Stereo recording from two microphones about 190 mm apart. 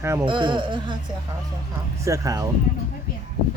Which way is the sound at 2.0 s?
15° right (ahead or behind).